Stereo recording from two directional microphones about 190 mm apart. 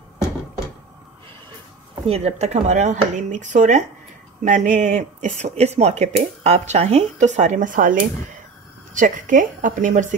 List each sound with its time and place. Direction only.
2.0 s a woman's voice: 35° right (ahead or behind)